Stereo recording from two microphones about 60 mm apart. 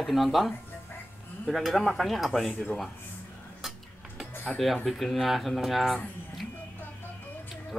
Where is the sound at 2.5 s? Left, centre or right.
Left.